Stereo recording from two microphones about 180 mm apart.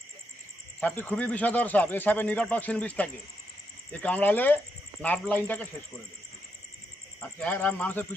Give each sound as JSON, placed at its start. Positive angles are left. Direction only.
{"t": 0.8, "sound": "a man's voice", "side_deg": 10}
{"t": 7.2, "sound": "a man's voice", "side_deg": 5}